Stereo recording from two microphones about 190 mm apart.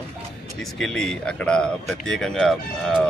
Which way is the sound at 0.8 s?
5° left (ahead or behind).